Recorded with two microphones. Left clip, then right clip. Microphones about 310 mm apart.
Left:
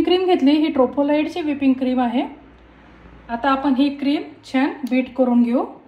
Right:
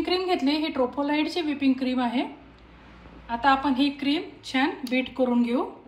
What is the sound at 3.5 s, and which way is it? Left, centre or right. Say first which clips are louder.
Speech: left 4 dB; centre.